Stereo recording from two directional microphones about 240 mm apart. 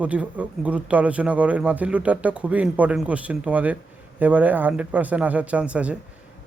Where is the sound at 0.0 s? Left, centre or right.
Centre.